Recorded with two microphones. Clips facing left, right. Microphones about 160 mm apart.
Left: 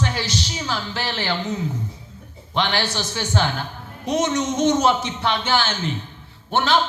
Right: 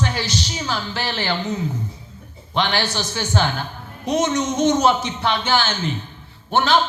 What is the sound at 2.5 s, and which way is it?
A man's voice, 45° right (ahead or behind).